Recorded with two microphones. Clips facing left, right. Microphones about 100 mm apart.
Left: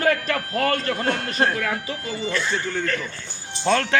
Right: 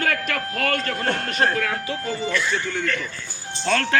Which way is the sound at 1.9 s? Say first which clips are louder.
Right 2 dB; 30° left (ahead or behind).